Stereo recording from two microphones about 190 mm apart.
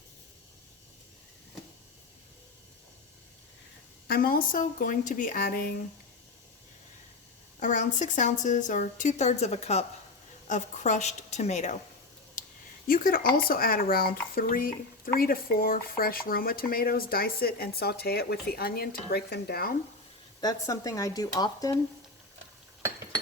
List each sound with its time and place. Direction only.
4.1 s speech: 50° left (ahead or behind)
7.6 s a woman's voice: 40° left (ahead or behind)
12.9 s speech: 50° left (ahead or behind)
20.4 s speech: 20° left (ahead or behind)